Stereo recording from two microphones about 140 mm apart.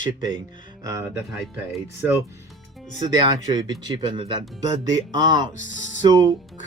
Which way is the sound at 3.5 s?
30° right (ahead or behind).